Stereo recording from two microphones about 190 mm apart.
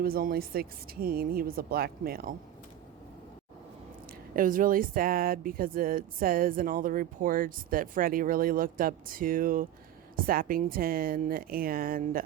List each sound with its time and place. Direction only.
0.0 s speech: 50° right (ahead or behind)
4.4 s speech: 45° right (ahead or behind)